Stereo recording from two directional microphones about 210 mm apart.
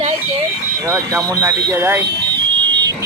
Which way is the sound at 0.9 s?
10° right (ahead or behind).